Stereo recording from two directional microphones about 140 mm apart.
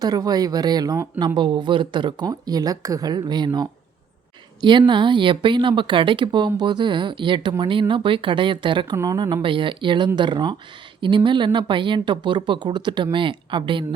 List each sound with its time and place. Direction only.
0.0 s speech: 25° right (ahead or behind)
4.9 s speech: 35° right (ahead or behind)